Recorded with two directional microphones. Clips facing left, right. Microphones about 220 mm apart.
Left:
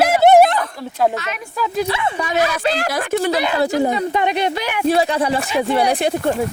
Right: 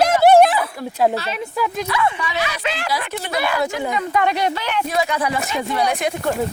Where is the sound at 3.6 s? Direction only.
35° left (ahead or behind).